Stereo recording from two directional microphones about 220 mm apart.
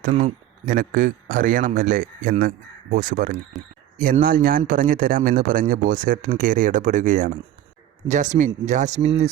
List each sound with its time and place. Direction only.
0.0 s a man's voice: 35° right (ahead or behind)
3.6 s speech: centre (ahead or behind)
3.9 s a man's voice: 40° right (ahead or behind)